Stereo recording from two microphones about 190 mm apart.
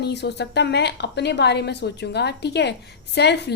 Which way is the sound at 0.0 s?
60° left (ahead or behind).